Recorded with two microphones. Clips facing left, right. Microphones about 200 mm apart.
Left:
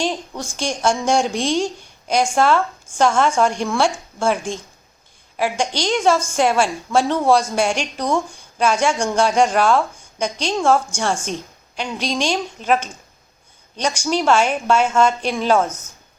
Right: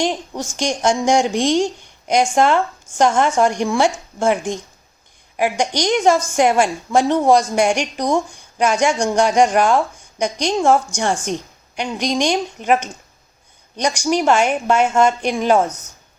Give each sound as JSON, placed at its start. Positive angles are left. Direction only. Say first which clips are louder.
{"t": 0.0, "sound": "a woman's voice", "louder": "right 2 dB", "side_deg": -15}